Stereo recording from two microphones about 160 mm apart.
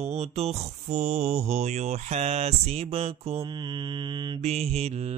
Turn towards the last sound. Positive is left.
turn(degrees=-40)  # may be behind; listen again after turning